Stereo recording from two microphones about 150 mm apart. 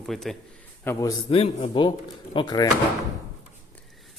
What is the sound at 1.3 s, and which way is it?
Speech, 40° left (ahead or behind).